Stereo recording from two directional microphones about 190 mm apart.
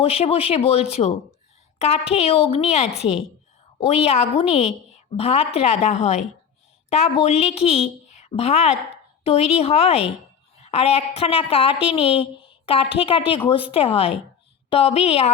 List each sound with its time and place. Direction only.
0.0 s a woman's voice: 30° left (ahead or behind)